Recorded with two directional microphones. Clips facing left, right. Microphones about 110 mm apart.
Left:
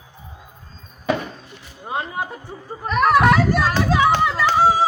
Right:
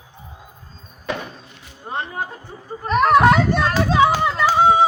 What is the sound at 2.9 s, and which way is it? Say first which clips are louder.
Speech: right 2 dB; 20° right (ahead or behind).